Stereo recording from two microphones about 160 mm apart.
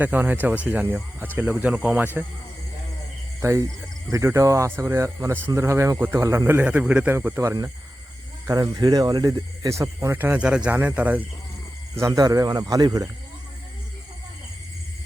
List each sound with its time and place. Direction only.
0.0 s speech: 10° right (ahead or behind)
3.4 s speech: 20° right (ahead or behind)
11.9 s speech: 20° right (ahead or behind)